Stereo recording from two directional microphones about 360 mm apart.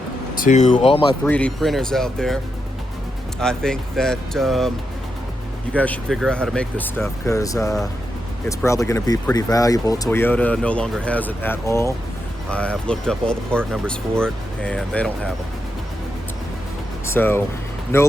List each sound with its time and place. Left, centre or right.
0.3 s speech: centre
1.2 s speech: centre
3.4 s speech: centre
5.7 s speech: centre
17.1 s speech: centre